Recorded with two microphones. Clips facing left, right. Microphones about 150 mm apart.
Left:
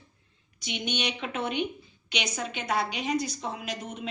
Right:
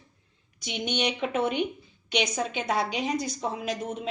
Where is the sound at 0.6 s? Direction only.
55° right (ahead or behind).